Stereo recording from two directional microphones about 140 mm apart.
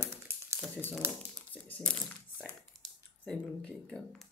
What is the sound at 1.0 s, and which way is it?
Speech, 15° right (ahead or behind).